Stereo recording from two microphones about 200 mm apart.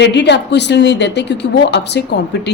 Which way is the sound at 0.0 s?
60° left (ahead or behind).